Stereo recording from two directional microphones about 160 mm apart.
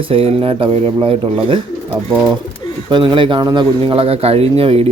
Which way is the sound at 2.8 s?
30° right (ahead or behind).